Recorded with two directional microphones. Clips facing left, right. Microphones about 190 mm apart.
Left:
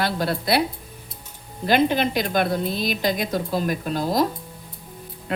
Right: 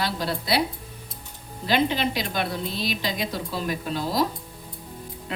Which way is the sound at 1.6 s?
50° left (ahead or behind).